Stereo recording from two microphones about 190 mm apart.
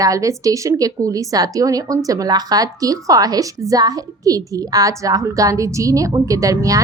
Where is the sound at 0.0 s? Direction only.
15° right (ahead or behind).